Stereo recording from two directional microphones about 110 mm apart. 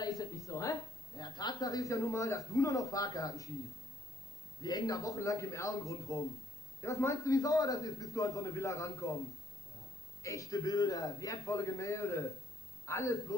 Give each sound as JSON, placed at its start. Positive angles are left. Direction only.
{"t": 0.0, "sound": "a woman's voice", "side_deg": 35}
{"t": 4.6, "sound": "a man's voice", "side_deg": 35}
{"t": 10.2, "sound": "a man's voice", "side_deg": 30}